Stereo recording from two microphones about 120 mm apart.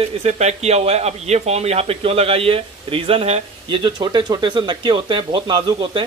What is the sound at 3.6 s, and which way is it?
Speech, 40° right (ahead or behind).